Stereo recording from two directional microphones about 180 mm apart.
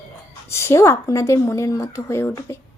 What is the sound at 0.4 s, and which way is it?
Speech, 15° left (ahead or behind).